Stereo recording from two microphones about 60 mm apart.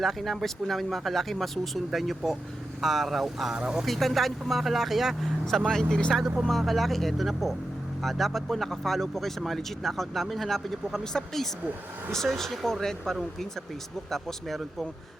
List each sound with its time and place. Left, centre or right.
0.0 s speech: centre
3.5 s speech: centre
3.8 s speech: centre
6.4 s speech: centre